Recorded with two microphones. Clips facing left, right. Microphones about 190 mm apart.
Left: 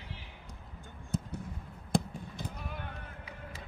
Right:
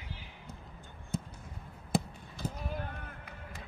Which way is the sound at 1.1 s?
Centre (ahead or behind).